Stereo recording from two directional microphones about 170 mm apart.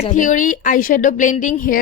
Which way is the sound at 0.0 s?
50° left (ahead or behind).